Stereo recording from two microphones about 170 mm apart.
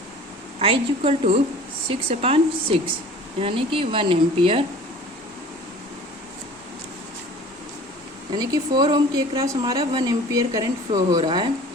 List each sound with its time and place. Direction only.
0.6 s speech: 35° right (ahead or behind)
8.4 s a woman's voice: 25° right (ahead or behind)